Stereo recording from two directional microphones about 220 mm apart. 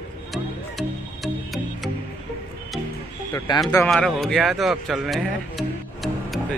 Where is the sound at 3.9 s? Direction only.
Centre (ahead or behind).